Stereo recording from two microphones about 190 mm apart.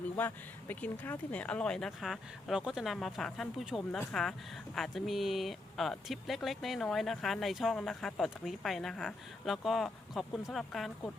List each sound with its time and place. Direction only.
0.2 s speech: 10° left (ahead or behind)